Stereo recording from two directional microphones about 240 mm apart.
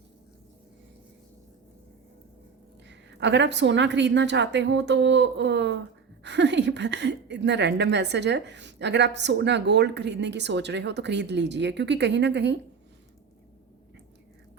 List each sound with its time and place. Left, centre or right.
2.8 s a woman's voice: right